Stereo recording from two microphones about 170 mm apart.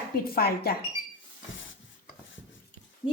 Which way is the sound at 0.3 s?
65° left (ahead or behind).